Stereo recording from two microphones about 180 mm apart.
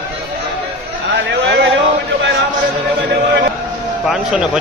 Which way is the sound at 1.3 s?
75° right (ahead or behind).